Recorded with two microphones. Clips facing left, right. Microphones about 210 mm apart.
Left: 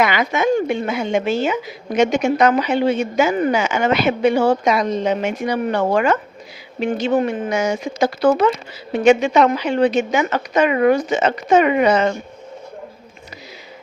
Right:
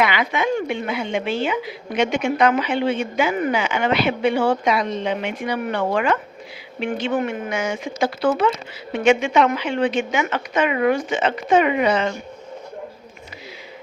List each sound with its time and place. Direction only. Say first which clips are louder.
0.0 s a woman's voice: left 3 dB; 45° left (ahead or behind)